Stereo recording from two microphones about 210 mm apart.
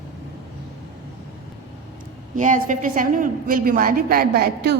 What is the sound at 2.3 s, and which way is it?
A woman's voice, 40° right (ahead or behind).